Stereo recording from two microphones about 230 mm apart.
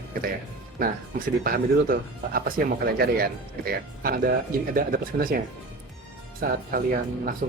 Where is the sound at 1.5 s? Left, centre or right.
Right.